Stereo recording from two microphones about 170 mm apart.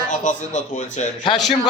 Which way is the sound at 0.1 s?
45° left (ahead or behind).